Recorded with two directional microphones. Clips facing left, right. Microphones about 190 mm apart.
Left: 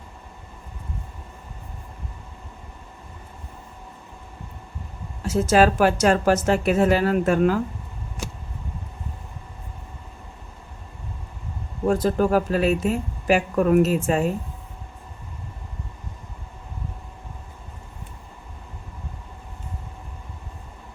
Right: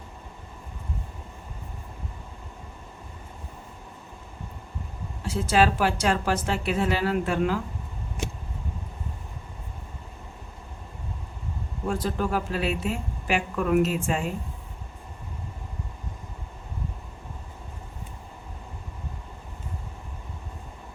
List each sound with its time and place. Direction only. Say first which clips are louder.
5.2 s a woman's voice: left 5 dB; 45° left (ahead or behind)
11.9 s a woman's voice: left 7 dB; 45° left (ahead or behind)